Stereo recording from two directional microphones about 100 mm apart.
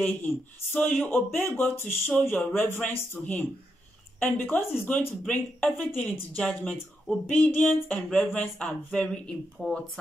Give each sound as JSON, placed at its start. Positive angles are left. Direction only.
{"t": 0.0, "sound": "speech", "side_deg": 20}